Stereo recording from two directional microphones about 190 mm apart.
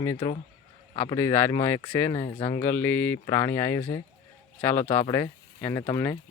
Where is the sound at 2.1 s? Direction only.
25° left (ahead or behind).